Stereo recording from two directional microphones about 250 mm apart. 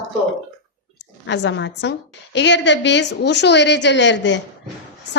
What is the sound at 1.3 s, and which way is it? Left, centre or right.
A woman's voice, left.